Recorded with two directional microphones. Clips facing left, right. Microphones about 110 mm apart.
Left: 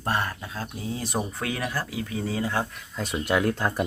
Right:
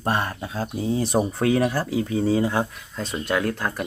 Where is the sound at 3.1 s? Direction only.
15° left (ahead or behind).